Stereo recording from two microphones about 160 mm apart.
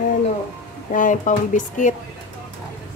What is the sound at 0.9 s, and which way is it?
A woman's voice, 55° left (ahead or behind).